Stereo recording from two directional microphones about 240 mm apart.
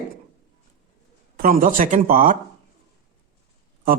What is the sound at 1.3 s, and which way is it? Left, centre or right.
Speech, right.